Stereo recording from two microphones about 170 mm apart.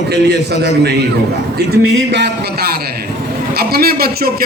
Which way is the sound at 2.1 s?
80° right.